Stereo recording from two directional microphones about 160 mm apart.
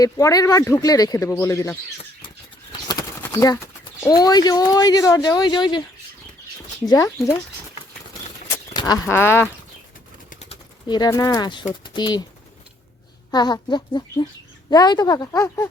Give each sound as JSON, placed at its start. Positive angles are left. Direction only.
{"t": 0.0, "sound": "speech", "side_deg": 20}
{"t": 2.8, "sound": "a sound", "side_deg": 25}
{"t": 4.1, "sound": "speech", "side_deg": 25}
{"t": 6.8, "sound": "speech", "side_deg": 20}
{"t": 9.0, "sound": "speech", "side_deg": 15}
{"t": 10.2, "sound": "bird", "side_deg": 45}
{"t": 10.8, "sound": "speech", "side_deg": 25}
{"t": 13.3, "sound": "speech", "side_deg": 25}